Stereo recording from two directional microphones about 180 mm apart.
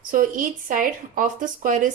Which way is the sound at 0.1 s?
50° right (ahead or behind).